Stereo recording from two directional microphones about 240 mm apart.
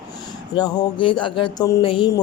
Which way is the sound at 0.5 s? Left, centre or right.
Centre.